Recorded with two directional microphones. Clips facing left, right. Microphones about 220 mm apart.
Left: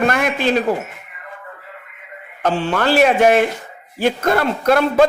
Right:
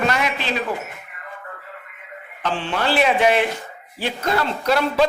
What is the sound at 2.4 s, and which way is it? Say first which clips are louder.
A man's voice: left 5 dB; 45° left (ahead or behind).